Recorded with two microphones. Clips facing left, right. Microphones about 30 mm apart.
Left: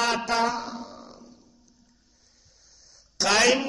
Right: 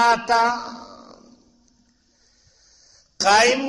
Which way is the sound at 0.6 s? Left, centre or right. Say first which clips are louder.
Right 1 dB; centre.